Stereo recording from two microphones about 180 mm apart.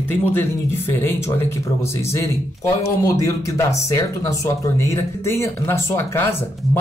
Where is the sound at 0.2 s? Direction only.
10° left (ahead or behind).